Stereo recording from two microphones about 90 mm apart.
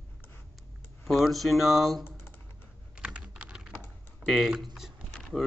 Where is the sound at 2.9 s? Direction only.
10° right (ahead or behind).